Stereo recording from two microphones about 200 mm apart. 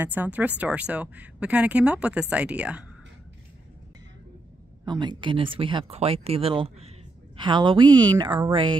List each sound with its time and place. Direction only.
0.0 s a woman's voice: 10° right (ahead or behind)
4.8 s speech: 25° right (ahead or behind)